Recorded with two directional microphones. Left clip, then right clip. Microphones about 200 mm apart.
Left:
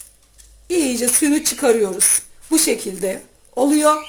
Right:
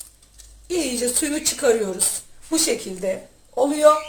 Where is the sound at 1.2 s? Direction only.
40° left (ahead or behind).